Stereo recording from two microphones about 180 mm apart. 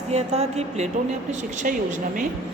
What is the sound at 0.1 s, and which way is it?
A woman's voice, 35° right (ahead or behind).